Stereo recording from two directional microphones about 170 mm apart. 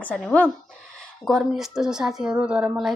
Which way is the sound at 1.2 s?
Centre (ahead or behind).